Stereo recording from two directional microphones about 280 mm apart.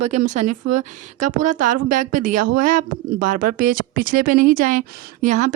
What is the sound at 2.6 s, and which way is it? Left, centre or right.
A woman's voice, right.